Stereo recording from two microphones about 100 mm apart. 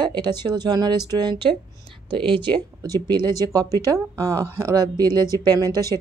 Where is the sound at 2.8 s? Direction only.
40° right (ahead or behind).